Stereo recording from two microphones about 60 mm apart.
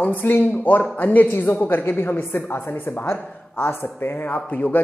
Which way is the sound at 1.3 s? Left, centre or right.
Left.